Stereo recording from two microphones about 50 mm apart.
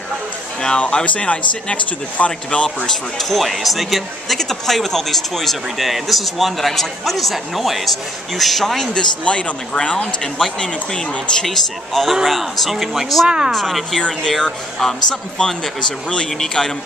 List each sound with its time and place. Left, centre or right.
0.6 s speech: centre
3.2 s speech: centre
8.9 s speech: left
11.4 s speech: centre